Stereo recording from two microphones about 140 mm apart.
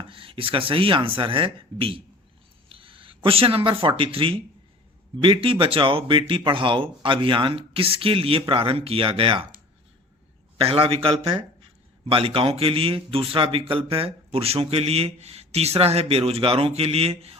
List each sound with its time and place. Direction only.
0.0 s speech: 40° right (ahead or behind)
10.6 s speech: 40° right (ahead or behind)